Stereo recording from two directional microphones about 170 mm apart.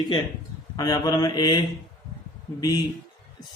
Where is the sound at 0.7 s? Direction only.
25° left (ahead or behind).